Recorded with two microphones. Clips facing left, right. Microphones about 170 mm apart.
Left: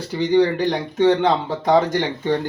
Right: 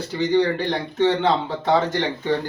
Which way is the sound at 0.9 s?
15° left (ahead or behind).